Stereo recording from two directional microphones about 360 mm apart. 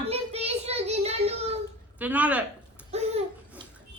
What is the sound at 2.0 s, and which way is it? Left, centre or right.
Speech, centre.